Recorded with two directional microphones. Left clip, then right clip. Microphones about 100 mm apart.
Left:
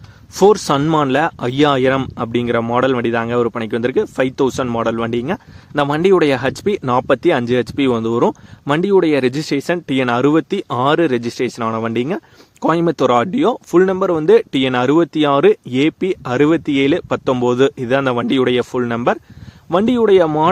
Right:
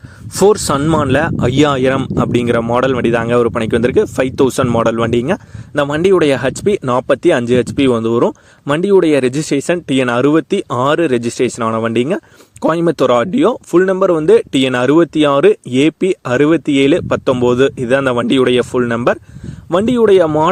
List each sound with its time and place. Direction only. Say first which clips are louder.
0.3 s speech: right 1 dB; 50° right (ahead or behind)
0.8 s speech: right 1 dB; 30° right (ahead or behind)
1.5 s speech: right 2 dB; 80° right; by 5.4 s 55° right (ahead or behind)
5.7 s speech: right 1 dB; 25° right (ahead or behind)